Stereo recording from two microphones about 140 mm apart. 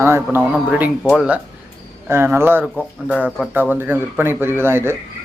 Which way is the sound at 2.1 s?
15° right (ahead or behind).